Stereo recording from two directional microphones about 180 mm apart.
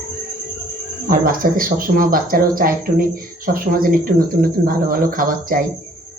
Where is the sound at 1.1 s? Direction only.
50° right (ahead or behind).